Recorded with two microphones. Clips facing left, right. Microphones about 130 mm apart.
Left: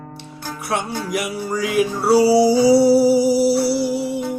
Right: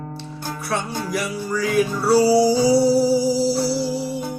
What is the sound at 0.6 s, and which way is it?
Music, 20° left (ahead or behind).